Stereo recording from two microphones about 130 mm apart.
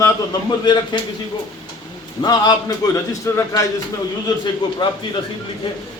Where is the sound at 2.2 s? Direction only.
30° left (ahead or behind).